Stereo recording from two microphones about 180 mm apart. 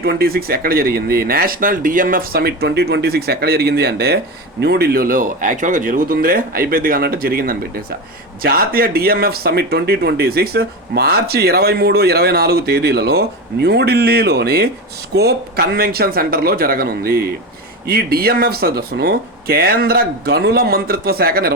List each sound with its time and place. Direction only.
0.0 s speech: 60° right (ahead or behind)